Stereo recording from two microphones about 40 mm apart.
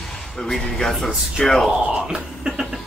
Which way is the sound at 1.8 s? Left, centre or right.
Centre.